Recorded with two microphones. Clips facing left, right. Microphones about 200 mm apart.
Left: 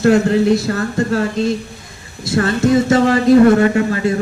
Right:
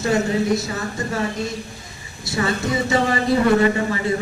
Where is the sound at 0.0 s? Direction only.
65° left (ahead or behind).